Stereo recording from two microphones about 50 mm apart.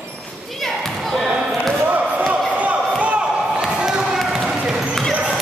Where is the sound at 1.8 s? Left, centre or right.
Right.